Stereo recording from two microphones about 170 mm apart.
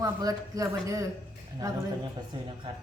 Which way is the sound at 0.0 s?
20° right (ahead or behind).